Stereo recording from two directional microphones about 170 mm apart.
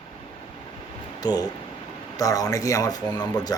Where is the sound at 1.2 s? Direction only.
20° left (ahead or behind).